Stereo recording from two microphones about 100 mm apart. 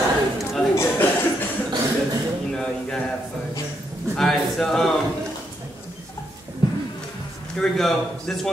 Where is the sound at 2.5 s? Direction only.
5° left (ahead or behind).